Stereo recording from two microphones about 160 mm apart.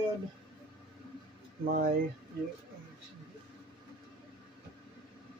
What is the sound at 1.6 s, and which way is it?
Speech, 65° right (ahead or behind).